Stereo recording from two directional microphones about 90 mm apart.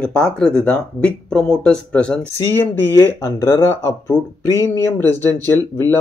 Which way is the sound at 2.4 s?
25° left (ahead or behind).